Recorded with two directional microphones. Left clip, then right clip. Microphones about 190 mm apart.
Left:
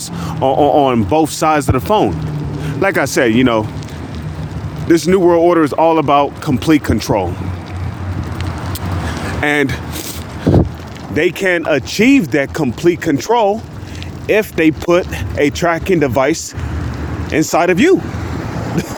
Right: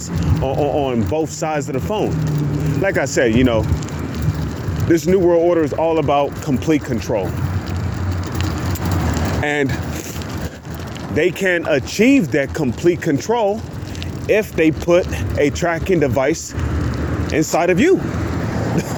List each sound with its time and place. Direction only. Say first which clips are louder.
0.4 s speech: left 8 dB; 50° left (ahead or behind)
4.9 s speech: left 3 dB; 40° left (ahead or behind)
9.4 s speech: left 6 dB; 40° left (ahead or behind)
11.1 s speech: left 3 dB; 40° left (ahead or behind)